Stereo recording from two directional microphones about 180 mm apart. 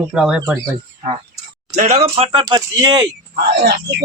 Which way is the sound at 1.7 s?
40° right (ahead or behind).